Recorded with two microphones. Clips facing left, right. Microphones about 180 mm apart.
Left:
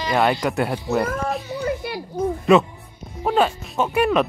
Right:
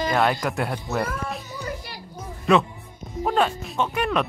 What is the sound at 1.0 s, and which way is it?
Speech, 45° left (ahead or behind).